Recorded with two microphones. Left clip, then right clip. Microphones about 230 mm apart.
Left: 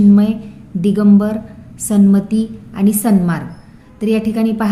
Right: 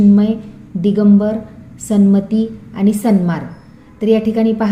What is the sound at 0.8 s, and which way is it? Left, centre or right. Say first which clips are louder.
A woman's voice: even; left.